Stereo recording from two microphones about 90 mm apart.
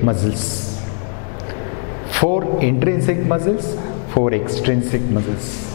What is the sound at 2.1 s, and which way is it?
A man's voice, 15° left (ahead or behind).